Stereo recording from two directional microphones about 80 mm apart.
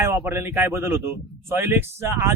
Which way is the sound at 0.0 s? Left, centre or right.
Right.